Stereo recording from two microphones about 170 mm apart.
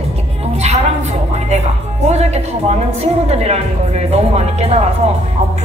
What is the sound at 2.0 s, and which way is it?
Music, 40° right (ahead or behind).